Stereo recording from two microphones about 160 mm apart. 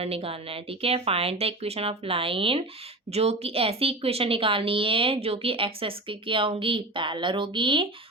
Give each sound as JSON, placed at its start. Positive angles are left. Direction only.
{"t": 0.0, "sound": "a woman's voice", "side_deg": -35}